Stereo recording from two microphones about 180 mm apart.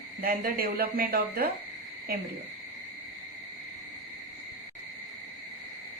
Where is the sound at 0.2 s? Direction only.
55° right (ahead or behind).